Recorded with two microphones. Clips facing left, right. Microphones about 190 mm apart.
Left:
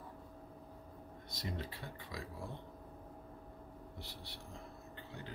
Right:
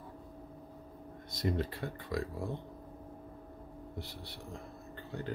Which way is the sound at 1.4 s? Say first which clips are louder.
Right 10 dB; 55° right (ahead or behind).